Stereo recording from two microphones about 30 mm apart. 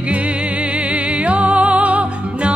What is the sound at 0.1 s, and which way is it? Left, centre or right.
Music, right.